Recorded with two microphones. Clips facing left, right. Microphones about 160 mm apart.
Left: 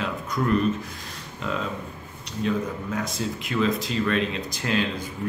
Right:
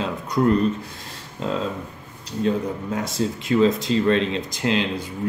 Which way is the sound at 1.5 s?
30° right (ahead or behind).